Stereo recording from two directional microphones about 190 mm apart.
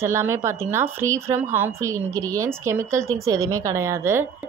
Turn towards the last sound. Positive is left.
turn(degrees=-15)  # may be behind; listen again after turning